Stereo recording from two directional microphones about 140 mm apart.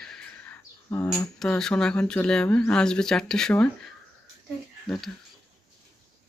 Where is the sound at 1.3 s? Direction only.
5° left (ahead or behind).